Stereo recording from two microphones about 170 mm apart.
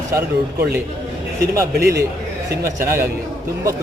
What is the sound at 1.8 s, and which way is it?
Speech, 65° right (ahead or behind).